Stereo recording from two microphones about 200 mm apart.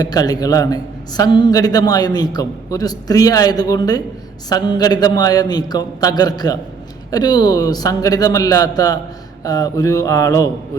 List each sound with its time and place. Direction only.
0.0 s a man's voice: 20° left (ahead or behind)